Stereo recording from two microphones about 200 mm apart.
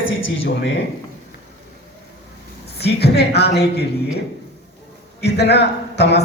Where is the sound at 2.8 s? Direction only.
55° left (ahead or behind).